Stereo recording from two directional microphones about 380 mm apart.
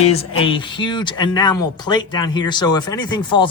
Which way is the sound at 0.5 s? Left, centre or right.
Centre.